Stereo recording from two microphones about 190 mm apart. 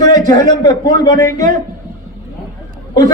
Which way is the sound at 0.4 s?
20° left (ahead or behind).